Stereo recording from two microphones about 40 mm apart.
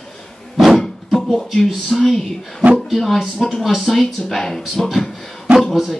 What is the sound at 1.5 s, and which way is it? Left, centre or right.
Speech, centre.